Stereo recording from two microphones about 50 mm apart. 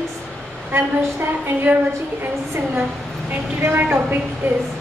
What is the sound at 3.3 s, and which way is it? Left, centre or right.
Speech, right.